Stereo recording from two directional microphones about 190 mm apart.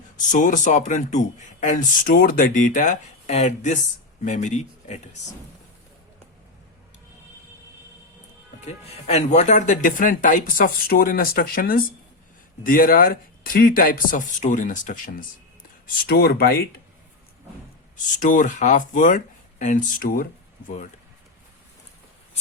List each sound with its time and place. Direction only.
0.3 s speech: 40° left (ahead or behind)
8.6 s speech: 35° left (ahead or behind)
16.0 s speech: 55° left (ahead or behind)
18.2 s speech: 45° left (ahead or behind)